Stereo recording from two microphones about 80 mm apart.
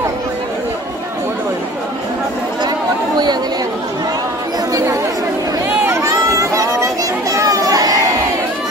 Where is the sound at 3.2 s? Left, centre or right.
Right.